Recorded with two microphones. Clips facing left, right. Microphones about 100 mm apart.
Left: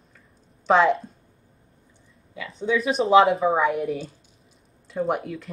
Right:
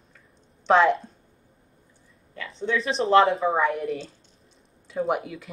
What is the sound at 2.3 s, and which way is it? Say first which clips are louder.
Speech: left 3 dB; 5° left (ahead or behind).